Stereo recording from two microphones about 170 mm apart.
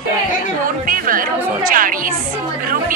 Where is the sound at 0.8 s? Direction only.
55° right (ahead or behind).